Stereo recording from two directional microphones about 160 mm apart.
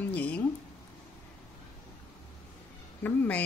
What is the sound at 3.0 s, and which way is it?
Speech, 10° left (ahead or behind).